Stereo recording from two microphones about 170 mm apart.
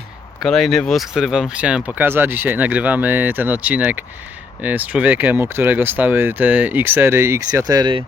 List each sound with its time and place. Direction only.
0.3 s speech: centre (ahead or behind); by 8.0 s 25° right (ahead or behind)